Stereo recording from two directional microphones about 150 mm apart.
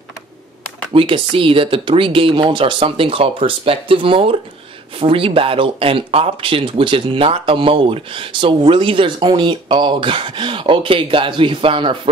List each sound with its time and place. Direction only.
0.9 s speech: 35° right (ahead or behind)